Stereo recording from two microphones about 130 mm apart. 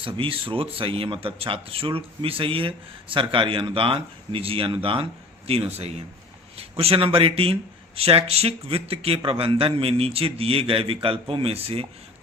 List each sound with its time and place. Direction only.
0.0 s speech: 45° right (ahead or behind)
6.6 s speech: 50° right (ahead or behind)